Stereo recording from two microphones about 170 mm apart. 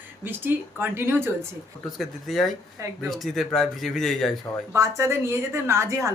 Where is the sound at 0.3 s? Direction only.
10° right (ahead or behind).